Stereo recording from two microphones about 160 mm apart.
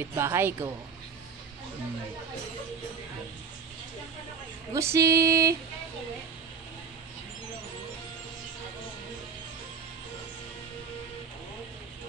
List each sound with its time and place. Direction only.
0.1 s speech: 15° right (ahead or behind)
4.7 s female singing: 15° right (ahead or behind)